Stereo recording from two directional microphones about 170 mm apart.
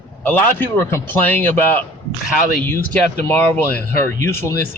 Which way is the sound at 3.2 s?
10° left (ahead or behind).